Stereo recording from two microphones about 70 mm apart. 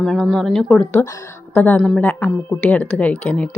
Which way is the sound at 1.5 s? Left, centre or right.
Left.